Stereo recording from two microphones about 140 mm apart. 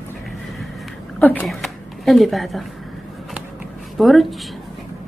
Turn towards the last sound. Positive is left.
turn(degrees=0)  # may be behind; listen again after turning